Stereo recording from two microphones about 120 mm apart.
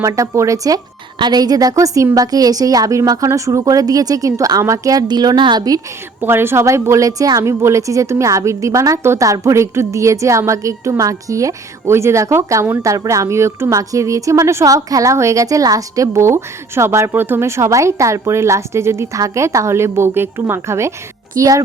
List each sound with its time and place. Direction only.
0.0 s a woman's voice: 25° right (ahead or behind)
6.2 s a woman's voice: 20° right (ahead or behind)